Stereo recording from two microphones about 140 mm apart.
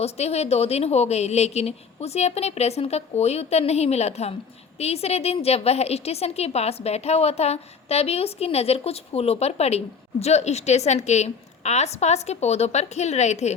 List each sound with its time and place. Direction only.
0.0 s a woman's voice: 50° left (ahead or behind)